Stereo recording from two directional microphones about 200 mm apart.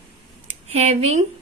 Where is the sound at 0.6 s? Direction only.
30° right (ahead or behind).